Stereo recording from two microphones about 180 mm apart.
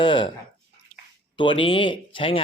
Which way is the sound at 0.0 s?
25° left (ahead or behind).